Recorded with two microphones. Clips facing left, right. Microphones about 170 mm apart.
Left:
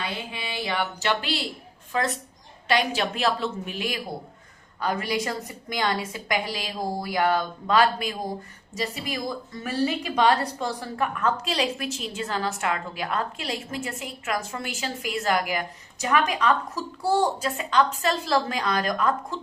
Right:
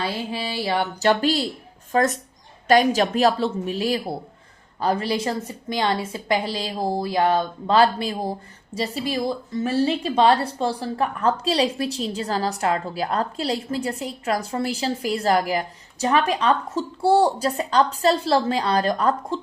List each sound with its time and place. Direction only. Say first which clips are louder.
0.0 s a woman's voice: right 6 dB; 35° right (ahead or behind)